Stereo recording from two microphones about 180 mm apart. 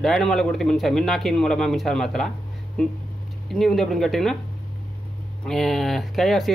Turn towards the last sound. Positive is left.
turn(degrees=0)  # may be behind; listen again after turning